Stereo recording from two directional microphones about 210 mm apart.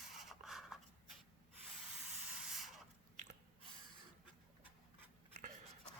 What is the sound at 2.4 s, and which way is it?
Mechanisms, centre (ahead or behind).